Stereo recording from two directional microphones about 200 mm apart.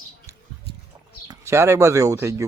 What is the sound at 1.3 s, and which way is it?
Speech, 15° right (ahead or behind).